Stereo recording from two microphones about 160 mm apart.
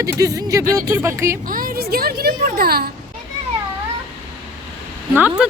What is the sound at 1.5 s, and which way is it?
A child's voice, 60° right (ahead or behind).